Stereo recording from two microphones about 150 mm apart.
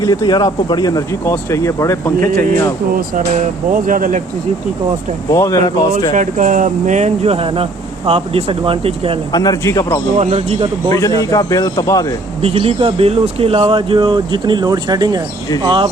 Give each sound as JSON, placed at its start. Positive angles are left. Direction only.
{"t": 0.0, "sound": "speech", "side_deg": 25}
{"t": 3.7, "sound": "speech", "side_deg": -65}
{"t": 5.3, "sound": "speech", "side_deg": 20}
{"t": 6.1, "sound": "speech", "side_deg": -55}
{"t": 9.3, "sound": "speech", "side_deg": 25}
{"t": 10.2, "sound": "a man's voice", "side_deg": -45}
{"t": 11.2, "sound": "speech", "side_deg": 20}
{"t": 12.4, "sound": "speech", "side_deg": -40}